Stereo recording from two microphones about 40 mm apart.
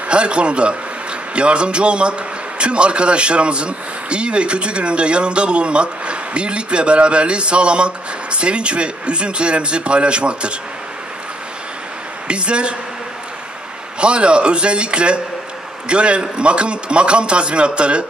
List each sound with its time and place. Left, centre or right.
0.1 s a man's voice: right
12.3 s a man's voice: right
13.9 s a man's voice: right